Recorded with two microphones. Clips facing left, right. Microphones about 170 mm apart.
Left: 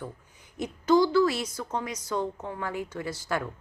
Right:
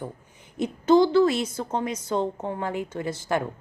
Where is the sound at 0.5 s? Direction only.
25° right (ahead or behind).